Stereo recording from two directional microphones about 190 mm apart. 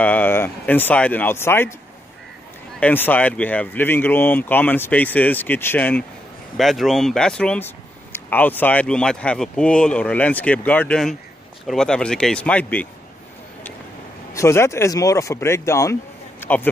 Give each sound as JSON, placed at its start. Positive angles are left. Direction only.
{"t": 0.0, "sound": "speech", "side_deg": 10}
{"t": 2.8, "sound": "speech", "side_deg": 10}
{"t": 14.3, "sound": "speech", "side_deg": 15}